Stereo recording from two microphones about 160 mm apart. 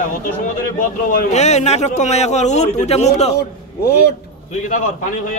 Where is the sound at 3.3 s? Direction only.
85° left.